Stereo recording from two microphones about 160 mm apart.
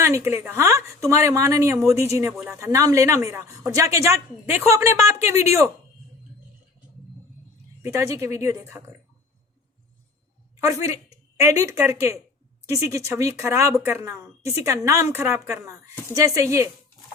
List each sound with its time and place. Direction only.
0.0 s speech: 15° right (ahead or behind)
7.8 s speech: 20° right (ahead or behind)
10.6 s speech: 20° right (ahead or behind)